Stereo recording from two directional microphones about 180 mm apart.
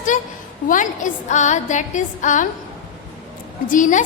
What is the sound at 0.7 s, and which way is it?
A woman's voice, 45° left (ahead or behind).